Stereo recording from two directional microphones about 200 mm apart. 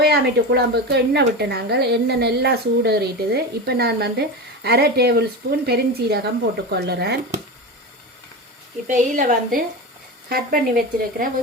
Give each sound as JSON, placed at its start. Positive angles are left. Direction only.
{"t": 0.0, "sound": "a woman's voice", "side_deg": -55}
{"t": 8.9, "sound": "a woman's voice", "side_deg": -40}